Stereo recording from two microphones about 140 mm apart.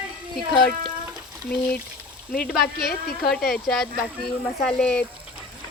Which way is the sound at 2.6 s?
90° left.